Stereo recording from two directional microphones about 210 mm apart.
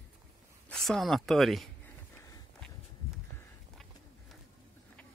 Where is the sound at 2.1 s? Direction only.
15° left (ahead or behind).